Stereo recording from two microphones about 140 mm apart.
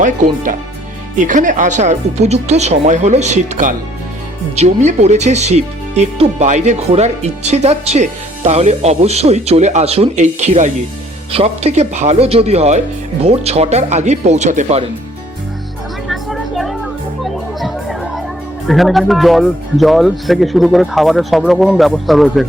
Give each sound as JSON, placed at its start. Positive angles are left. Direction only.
{"t": 0.0, "sound": "speech", "side_deg": -65}
{"t": 4.5, "sound": "speech", "side_deg": -55}
{"t": 11.3, "sound": "speech", "side_deg": -45}
{"t": 16.0, "sound": "music", "side_deg": 0}
{"t": 18.7, "sound": "speech", "side_deg": 0}